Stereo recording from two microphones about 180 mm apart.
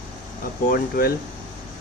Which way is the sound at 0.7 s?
55° left (ahead or behind).